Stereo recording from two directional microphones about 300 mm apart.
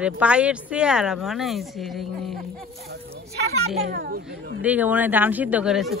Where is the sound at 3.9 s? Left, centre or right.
Right.